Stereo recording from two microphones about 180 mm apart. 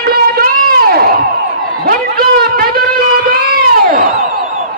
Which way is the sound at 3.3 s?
55° right (ahead or behind).